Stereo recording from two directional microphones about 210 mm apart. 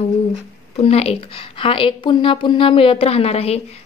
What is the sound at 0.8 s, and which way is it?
Speech, 30° left (ahead or behind).